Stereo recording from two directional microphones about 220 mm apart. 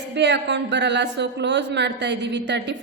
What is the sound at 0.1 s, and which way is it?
A woman's voice, 50° right (ahead or behind).